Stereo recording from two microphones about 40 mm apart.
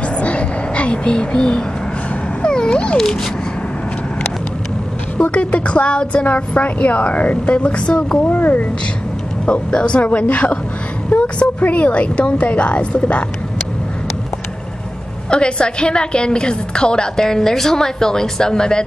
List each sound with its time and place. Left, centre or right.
0.2 s a sound: left
2.4 s dog: left
5.1 s a woman's voice: left
8.2 s a woman's voice: left
9.5 s a woman's voice: left
11.1 s vehicle: left
11.6 s a woman's voice: left
15.2 s a woman's voice: left